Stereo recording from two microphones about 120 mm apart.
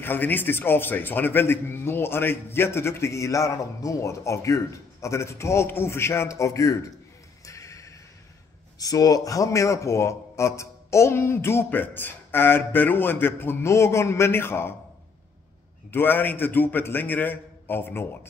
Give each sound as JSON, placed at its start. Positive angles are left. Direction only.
{"t": 0.0, "sound": "a man's voice", "side_deg": 15}
{"t": 7.4, "sound": "neigh", "side_deg": 25}
{"t": 8.7, "sound": "a man's voice", "side_deg": 30}
{"t": 15.9, "sound": "a man's voice", "side_deg": 15}